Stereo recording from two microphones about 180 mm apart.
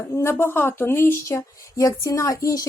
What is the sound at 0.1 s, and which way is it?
Speech, 15° left (ahead or behind).